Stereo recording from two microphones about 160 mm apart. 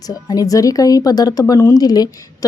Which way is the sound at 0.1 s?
25° left (ahead or behind).